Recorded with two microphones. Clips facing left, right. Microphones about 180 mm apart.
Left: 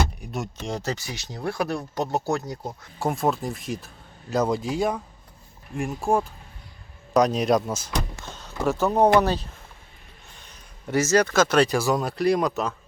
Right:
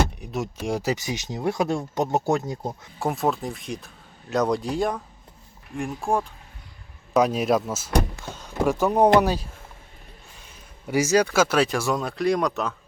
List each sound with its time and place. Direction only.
0.2 s speech: 5° right (ahead or behind); by 2.7 s 25° right (ahead or behind)
3.0 s speech: centre (ahead or behind)